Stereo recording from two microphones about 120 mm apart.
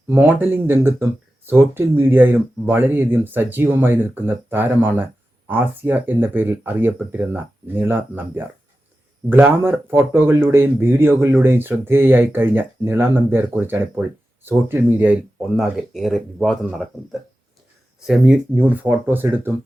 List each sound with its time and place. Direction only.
0.1 s speech: 15° right (ahead or behind)